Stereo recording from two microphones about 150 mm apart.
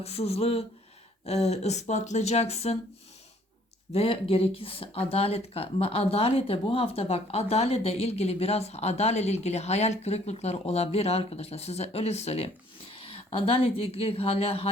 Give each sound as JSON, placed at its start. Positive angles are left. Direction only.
{"t": 0.0, "sound": "speech", "side_deg": 45}
{"t": 3.9, "sound": "speech", "side_deg": 40}